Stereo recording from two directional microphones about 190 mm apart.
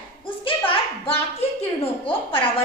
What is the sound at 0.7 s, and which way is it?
A woman's voice, 30° left (ahead or behind).